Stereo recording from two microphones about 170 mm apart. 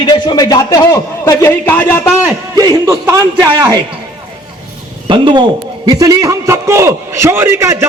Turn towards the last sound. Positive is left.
turn(degrees=-15)  # may be behind; listen again after turning